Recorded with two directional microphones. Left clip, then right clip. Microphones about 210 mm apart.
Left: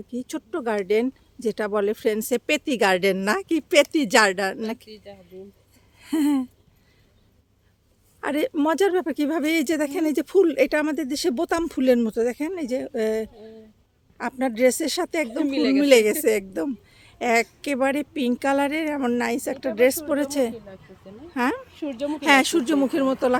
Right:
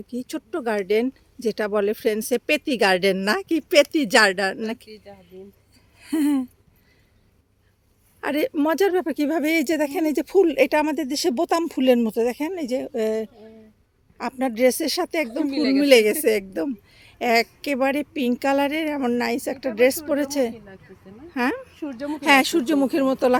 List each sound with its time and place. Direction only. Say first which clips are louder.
0.1 s speech: right 1 dB; 5° right (ahead or behind)
6.0 s a sound: even; 5° right (ahead or behind)
8.2 s speech: right 1 dB; 5° right (ahead or behind)
15.4 s a woman's voice: left 1 dB; 10° left (ahead or behind)
15.8 s a woman's voice: right 1 dB; 5° right (ahead or behind)
21.8 s speech: left 2 dB; 5° left (ahead or behind)
22.0 s speech: right 1 dB; 5° right (ahead or behind)